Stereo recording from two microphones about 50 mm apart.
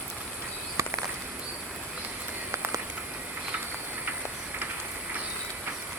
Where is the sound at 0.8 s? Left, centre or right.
Right.